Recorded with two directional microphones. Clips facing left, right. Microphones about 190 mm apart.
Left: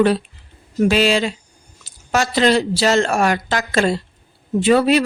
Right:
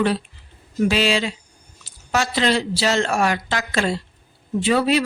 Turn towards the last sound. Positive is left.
turn(degrees=45)  # may be behind; listen again after turning